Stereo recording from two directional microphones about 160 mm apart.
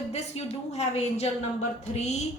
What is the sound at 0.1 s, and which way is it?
A woman's voice, 40° left (ahead or behind).